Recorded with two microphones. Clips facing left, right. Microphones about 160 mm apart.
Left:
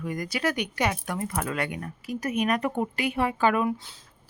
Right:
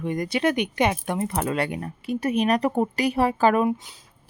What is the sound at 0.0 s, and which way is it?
Speech, 25° right (ahead or behind).